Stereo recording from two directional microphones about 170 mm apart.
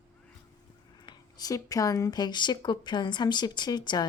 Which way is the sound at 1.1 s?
20° left (ahead or behind).